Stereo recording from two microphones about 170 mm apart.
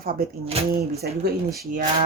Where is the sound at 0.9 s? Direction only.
70° right (ahead or behind).